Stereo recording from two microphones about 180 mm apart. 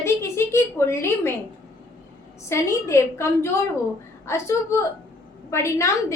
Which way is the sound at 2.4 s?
15° left (ahead or behind).